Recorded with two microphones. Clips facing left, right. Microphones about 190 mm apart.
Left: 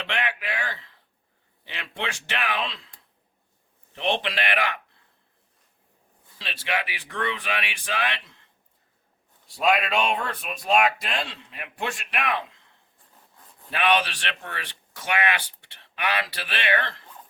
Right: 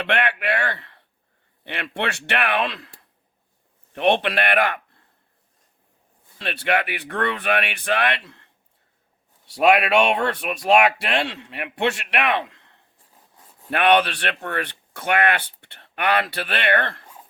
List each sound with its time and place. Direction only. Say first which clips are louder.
0.0 s a sound: right 7 dB; 65° right (ahead or behind)
1.6 s a man's voice: right 6 dB; 65° right (ahead or behind)
6.4 s speech: right 7 dB; 60° right (ahead or behind)
9.5 s a man's voice: right 6 dB; 75° right (ahead or behind); by 17.1 s 55° right (ahead or behind)